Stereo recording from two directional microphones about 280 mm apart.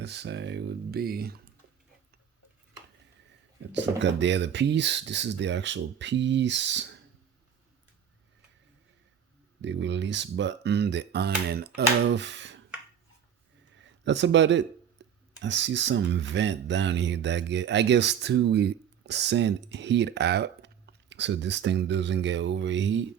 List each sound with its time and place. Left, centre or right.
0.0 s speech: right
3.7 s speech: right
9.6 s speech: right
13.7 s a sound: right
15.4 s speech: right